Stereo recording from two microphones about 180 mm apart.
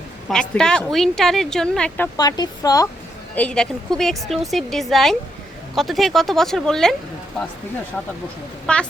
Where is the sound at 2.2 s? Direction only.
20° left (ahead or behind).